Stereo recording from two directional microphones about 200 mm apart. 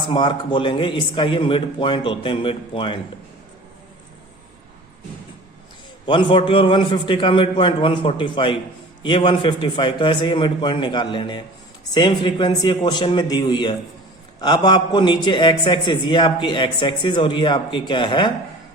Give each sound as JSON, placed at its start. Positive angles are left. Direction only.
{"t": 0.1, "sound": "a man's voice", "side_deg": 25}
{"t": 6.1, "sound": "a man's voice", "side_deg": 25}